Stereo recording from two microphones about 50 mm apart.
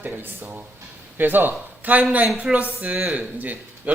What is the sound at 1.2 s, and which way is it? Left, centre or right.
Speech, right.